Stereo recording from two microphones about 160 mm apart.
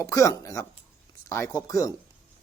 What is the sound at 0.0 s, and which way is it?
Speech, 20° left (ahead or behind).